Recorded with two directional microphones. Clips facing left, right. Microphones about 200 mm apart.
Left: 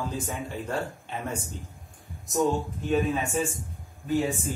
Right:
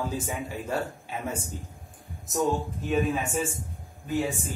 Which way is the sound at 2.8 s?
Centre (ahead or behind).